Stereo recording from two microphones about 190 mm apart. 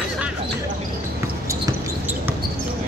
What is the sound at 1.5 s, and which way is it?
Basketball bounce, 15° right (ahead or behind).